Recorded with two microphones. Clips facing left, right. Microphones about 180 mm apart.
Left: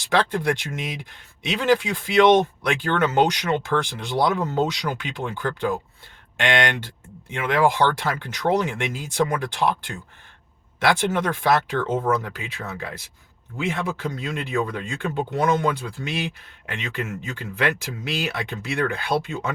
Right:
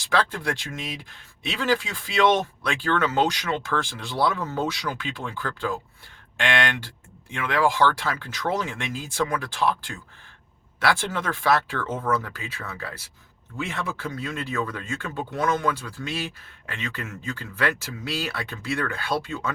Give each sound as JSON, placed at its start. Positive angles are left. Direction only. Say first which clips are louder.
{"t": 0.0, "sound": "speech", "louder": "left 3 dB", "side_deg": 20}